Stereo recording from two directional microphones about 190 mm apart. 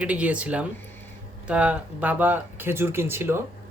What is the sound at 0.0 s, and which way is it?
Speech, 5° right (ahead or behind).